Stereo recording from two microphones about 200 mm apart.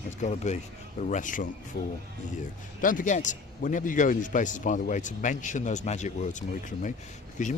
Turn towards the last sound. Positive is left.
turn(degrees=40)  # may be behind; listen again after turning